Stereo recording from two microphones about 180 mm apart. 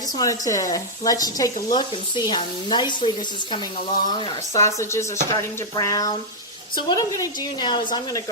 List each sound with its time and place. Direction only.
0.2 s speech: 20° left (ahead or behind)